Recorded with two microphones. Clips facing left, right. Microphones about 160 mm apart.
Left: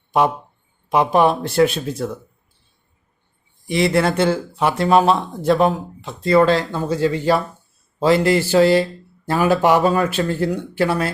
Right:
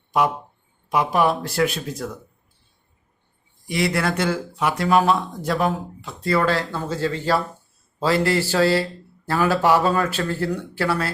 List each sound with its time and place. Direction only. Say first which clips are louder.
0.1 s speech: left 3 dB; 25° left (ahead or behind)
3.7 s speech: left 5 dB; 25° left (ahead or behind)